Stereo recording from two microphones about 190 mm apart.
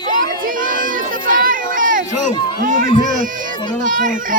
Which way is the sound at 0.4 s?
45° right (ahead or behind).